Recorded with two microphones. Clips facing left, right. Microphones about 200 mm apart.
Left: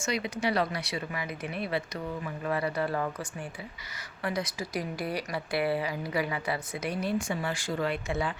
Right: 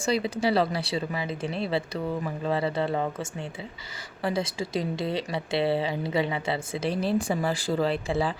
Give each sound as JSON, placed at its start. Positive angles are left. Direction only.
{"t": 0.0, "sound": "speech", "side_deg": -30}